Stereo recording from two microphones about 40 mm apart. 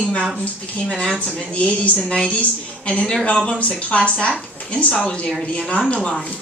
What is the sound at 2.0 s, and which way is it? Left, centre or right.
Speech, left.